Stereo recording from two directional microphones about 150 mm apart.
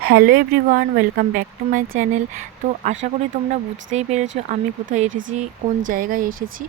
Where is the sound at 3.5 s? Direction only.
50° right (ahead or behind).